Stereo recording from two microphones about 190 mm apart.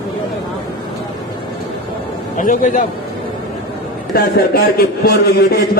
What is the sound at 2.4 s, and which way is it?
Speech, 40° left (ahead or behind).